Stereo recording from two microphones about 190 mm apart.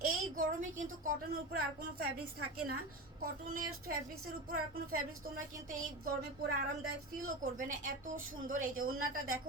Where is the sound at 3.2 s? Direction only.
50° right (ahead or behind).